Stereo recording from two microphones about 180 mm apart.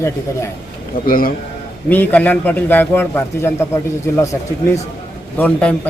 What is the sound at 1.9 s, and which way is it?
A man's voice, 10° left (ahead or behind).